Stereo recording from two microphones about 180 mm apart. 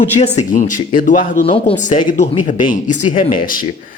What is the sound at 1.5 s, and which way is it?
Speech, 30° left (ahead or behind).